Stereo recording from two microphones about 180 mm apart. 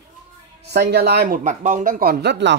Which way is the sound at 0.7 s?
65° right (ahead or behind).